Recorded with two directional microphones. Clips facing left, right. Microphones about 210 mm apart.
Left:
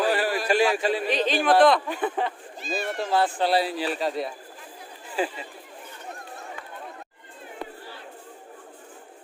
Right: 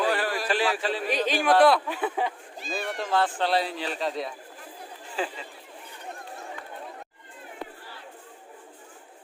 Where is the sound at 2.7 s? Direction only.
5° left (ahead or behind).